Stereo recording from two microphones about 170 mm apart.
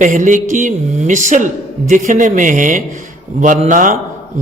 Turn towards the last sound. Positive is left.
turn(degrees=-50)  # may be behind; listen again after turning